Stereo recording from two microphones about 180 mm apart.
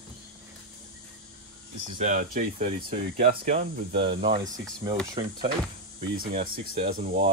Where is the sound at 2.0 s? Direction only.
45° right (ahead or behind).